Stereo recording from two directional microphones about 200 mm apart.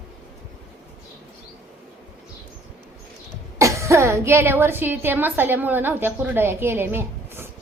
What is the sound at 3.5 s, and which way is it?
A woman's voice, 15° right (ahead or behind).